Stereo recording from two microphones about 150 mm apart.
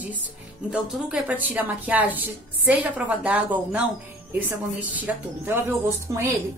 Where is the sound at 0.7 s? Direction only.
5° right (ahead or behind).